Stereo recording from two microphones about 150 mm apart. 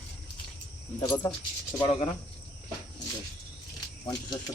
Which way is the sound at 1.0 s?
25° left (ahead or behind).